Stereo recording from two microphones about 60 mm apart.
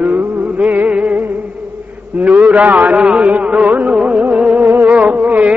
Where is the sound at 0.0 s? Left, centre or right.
Right.